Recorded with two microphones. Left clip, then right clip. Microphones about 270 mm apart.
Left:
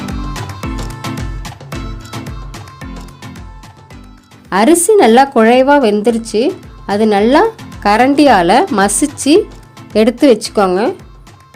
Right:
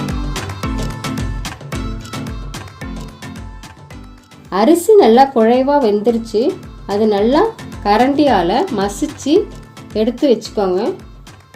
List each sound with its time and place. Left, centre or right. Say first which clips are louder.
0.0 s music: even; centre
4.4 s speech: left 2 dB; left